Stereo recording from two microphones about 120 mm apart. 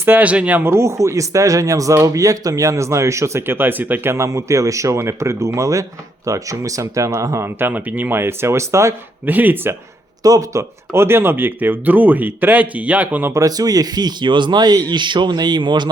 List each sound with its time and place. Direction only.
0.0 s speech: 15° right (ahead or behind)
10.2 s speech: 30° right (ahead or behind)
13.3 s a man's voice: 30° right (ahead or behind)